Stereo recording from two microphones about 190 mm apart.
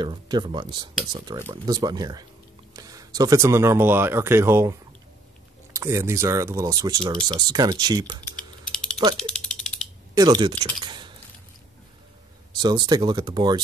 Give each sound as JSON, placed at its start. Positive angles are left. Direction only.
{"t": 0.0, "sound": "speech", "side_deg": -25}
{"t": 5.8, "sound": "speech", "side_deg": -15}
{"t": 8.7, "sound": "mechanisms", "side_deg": 5}
{"t": 10.1, "sound": "speech", "side_deg": -20}
{"t": 12.5, "sound": "speech", "side_deg": -20}